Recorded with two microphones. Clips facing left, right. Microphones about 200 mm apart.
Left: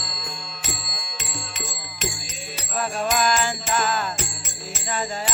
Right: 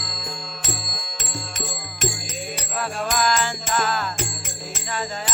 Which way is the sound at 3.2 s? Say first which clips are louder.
Even; 15° left (ahead or behind).